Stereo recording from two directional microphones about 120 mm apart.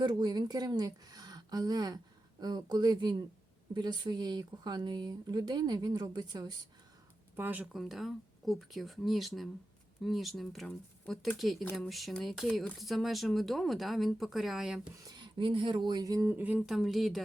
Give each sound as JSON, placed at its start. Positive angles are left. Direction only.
{"t": 0.0, "sound": "speech", "side_deg": -35}
{"t": 7.3, "sound": "speech", "side_deg": -15}
{"t": 7.8, "sound": "speech", "side_deg": 0}
{"t": 15.0, "sound": "speech", "side_deg": -40}
{"t": 16.3, "sound": "speech", "side_deg": -15}
{"t": 16.6, "sound": "speech", "side_deg": 0}